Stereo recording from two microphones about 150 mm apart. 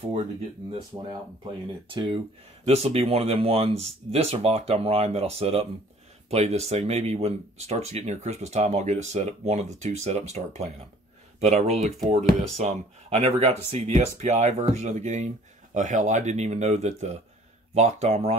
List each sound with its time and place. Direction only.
1.9 s speech: 35° right (ahead or behind)
2.6 s speech: 45° right (ahead or behind)